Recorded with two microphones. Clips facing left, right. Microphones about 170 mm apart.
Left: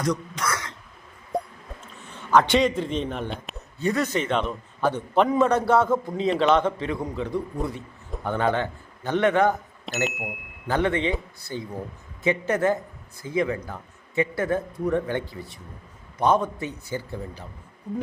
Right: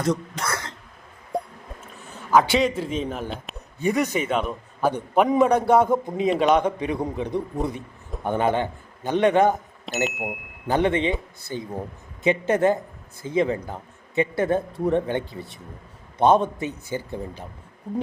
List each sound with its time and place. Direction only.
0.4 s throat clearing: 30° right (ahead or behind)
1.3 s music: centre (ahead or behind)
2.0 s a man's voice: 5° right (ahead or behind)
3.8 s a man's voice: 15° right (ahead or behind)
9.8 s speech: centre (ahead or behind)
10.7 s speech: 20° right (ahead or behind)